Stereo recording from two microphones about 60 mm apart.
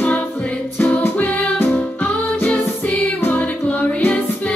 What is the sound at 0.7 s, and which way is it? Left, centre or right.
Music, left.